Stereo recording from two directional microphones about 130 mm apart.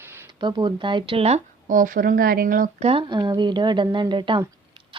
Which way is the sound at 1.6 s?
90° right.